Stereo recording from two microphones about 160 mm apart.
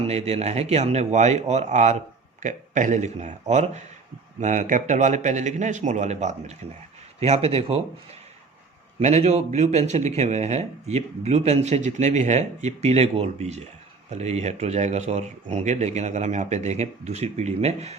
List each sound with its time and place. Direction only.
0.0 s speech: 40° right (ahead or behind)
9.0 s speech: 45° right (ahead or behind)